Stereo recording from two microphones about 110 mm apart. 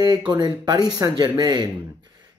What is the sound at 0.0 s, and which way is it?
Speech, 40° right (ahead or behind).